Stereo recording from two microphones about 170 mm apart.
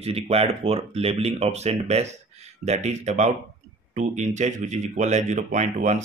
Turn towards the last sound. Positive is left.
turn(degrees=-45)  # may be behind; listen again after turning